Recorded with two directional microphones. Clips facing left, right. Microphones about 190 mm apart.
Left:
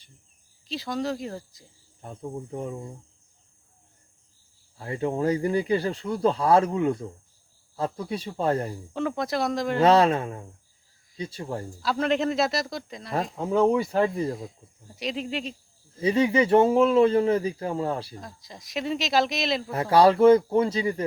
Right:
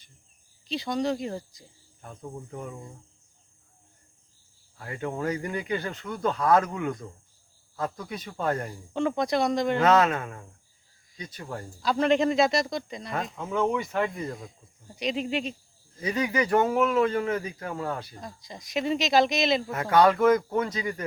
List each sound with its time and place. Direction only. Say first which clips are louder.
0.7 s speech: right 1 dB; centre (ahead or behind)
2.2 s speech: left 5 dB; 25° left (ahead or behind)
4.8 s speech: left 5 dB; 30° left (ahead or behind)
8.9 s speech: right 3 dB; 5° left (ahead or behind)
9.8 s speech: left 5 dB; 30° left (ahead or behind)
11.8 s speech: right 2 dB; 5° left (ahead or behind)
13.3 s speech: left 6 dB; 35° left (ahead or behind)
14.9 s speech: right 2 dB; centre (ahead or behind)
16.0 s speech: left 5 dB; 30° left (ahead or behind)
18.2 s speech: right 1 dB; centre (ahead or behind)
19.7 s speech: left 4 dB; 30° left (ahead or behind)